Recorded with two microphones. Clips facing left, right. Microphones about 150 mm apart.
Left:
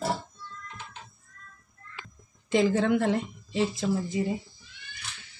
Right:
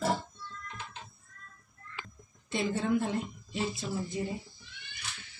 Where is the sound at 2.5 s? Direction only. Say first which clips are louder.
Left 7 dB; 90° left.